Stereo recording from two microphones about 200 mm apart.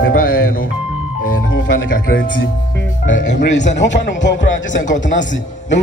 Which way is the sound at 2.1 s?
70° left (ahead or behind).